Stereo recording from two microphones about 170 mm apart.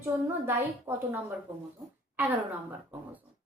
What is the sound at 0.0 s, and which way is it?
A woman's voice, 10° right (ahead or behind).